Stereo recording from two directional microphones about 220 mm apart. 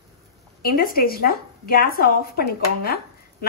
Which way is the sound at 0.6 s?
40° left (ahead or behind).